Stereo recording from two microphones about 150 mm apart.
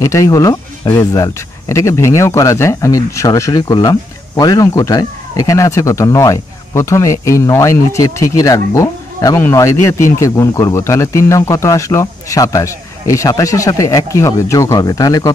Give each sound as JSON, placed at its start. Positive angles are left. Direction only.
{"t": 0.0, "sound": "speech", "side_deg": 20}